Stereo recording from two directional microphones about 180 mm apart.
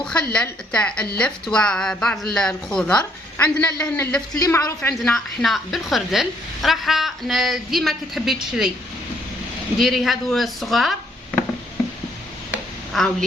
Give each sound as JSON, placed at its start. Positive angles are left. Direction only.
{"t": 0.0, "sound": "a woman's voice", "side_deg": 5}
{"t": 4.3, "sound": "a woman's voice", "side_deg": 20}
{"t": 5.0, "sound": "a woman's voice", "side_deg": 0}
{"t": 9.7, "sound": "a woman's voice", "side_deg": 0}
{"t": 12.5, "sound": "a sound", "side_deg": 0}